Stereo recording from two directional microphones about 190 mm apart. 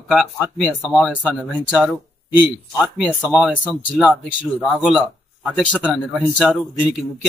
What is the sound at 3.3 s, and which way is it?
Speech, 5° right (ahead or behind).